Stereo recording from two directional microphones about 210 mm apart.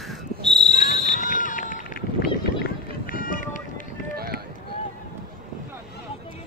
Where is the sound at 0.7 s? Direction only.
35° left (ahead or behind).